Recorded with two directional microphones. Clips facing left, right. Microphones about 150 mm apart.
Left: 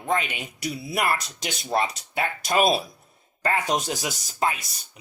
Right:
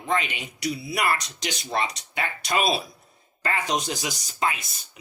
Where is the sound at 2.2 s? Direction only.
50° left (ahead or behind).